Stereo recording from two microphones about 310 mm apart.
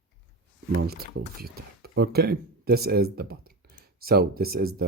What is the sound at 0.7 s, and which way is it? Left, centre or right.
Speech, right.